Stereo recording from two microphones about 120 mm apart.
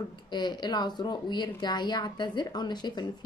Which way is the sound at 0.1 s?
35° left (ahead or behind).